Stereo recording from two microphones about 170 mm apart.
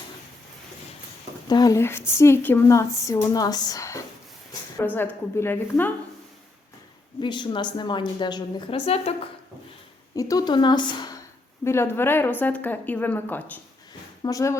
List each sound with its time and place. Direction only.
1.5 s speech: 20° left (ahead or behind)
7.2 s a woman's voice: 25° left (ahead or behind)
10.2 s a woman's voice: 20° left (ahead or behind)
11.6 s a woman's voice: 15° left (ahead or behind)